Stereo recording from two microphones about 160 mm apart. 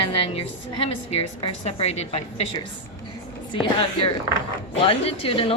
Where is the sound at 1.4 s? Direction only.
35° left (ahead or behind).